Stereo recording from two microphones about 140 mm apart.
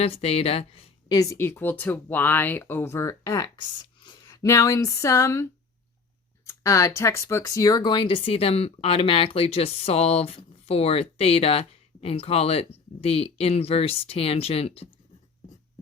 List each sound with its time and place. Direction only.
0.0 s speech: 45° left (ahead or behind)
1.1 s speech: 25° left (ahead or behind)
4.3 s speech: 25° left (ahead or behind); by 14.8 s 45° left (ahead or behind)